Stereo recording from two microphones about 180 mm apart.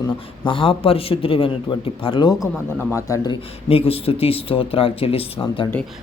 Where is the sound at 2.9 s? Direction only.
20° left (ahead or behind).